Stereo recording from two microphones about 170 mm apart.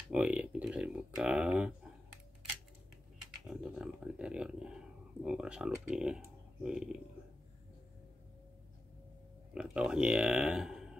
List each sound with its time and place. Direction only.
0.1 s speech: 5° right (ahead or behind)
3.4 s speech: 5° right (ahead or behind)
9.5 s speech: 5° right (ahead or behind)